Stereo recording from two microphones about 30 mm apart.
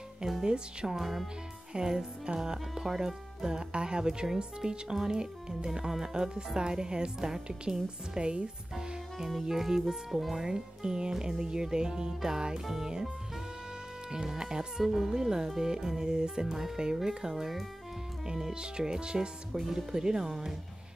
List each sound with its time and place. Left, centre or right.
0.4 s speech: right
0.9 s speech: centre
1.7 s speech: right
3.5 s speech: right
5.7 s speech: centre
6.1 s speech: right
7.2 s speech: centre
8.2 s speech: right
9.4 s speech: centre
14.1 s speech: right
14.9 s speech: centre
15.1 s speech: centre
18.5 s speech: right